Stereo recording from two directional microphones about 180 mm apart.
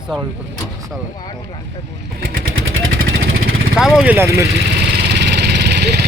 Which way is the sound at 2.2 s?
90° right.